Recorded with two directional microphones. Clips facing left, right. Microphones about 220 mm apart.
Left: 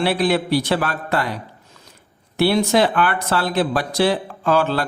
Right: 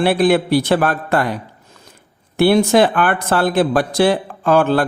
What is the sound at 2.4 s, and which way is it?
Speech, 50° right (ahead or behind).